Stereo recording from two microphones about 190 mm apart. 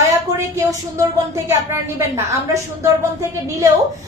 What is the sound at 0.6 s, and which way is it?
A woman's voice, 15° right (ahead or behind).